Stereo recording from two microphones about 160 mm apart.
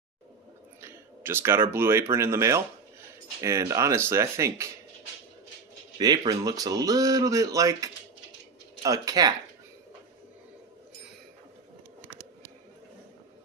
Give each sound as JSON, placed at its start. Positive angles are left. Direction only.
{"t": 0.7, "sound": "speech", "side_deg": -15}
{"t": 5.9, "sound": "speech", "side_deg": -25}